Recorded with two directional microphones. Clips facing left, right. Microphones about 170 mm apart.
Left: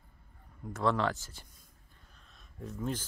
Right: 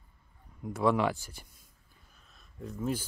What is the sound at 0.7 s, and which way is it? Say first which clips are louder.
Speech: right 3 dB; 10° right (ahead or behind).